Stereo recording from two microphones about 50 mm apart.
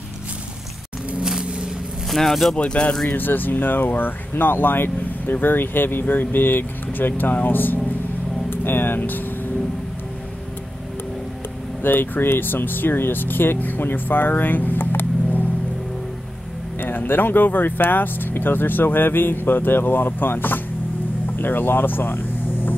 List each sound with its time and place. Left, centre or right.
1.2 s vehicle: centre
2.0 s speech: centre
2.5 s speech: left
3.1 s speech: left
11.8 s speech: left
16.8 s speech: left
21.4 s vehicle: left